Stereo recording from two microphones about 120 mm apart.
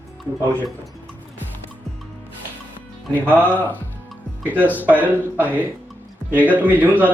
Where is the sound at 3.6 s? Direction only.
15° left (ahead or behind).